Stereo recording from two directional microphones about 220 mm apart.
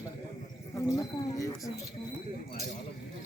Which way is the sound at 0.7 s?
15° left (ahead or behind).